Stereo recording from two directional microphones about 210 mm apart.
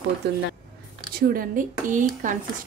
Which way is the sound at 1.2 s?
40° right (ahead or behind).